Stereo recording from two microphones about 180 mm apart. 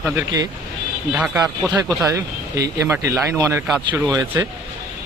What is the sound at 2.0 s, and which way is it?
Speech, 15° right (ahead or behind).